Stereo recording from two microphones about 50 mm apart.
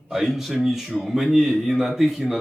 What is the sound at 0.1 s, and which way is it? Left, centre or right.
Speech, centre.